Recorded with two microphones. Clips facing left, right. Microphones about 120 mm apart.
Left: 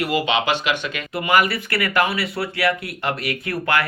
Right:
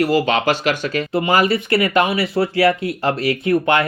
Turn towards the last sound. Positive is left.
turn(degrees=-25)  # may be behind; listen again after turning